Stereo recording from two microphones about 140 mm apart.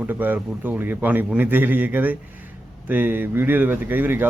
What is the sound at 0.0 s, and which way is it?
Speech, 15° right (ahead or behind).